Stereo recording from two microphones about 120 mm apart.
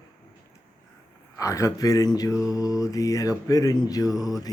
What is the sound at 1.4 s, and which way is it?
Mantra, 25° left (ahead or behind).